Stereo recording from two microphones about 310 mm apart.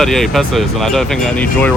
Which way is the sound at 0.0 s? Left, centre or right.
Centre.